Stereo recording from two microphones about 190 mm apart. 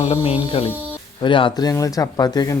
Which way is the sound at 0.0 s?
35° left (ahead or behind).